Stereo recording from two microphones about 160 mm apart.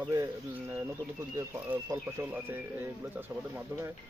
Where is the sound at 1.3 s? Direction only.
20° right (ahead or behind).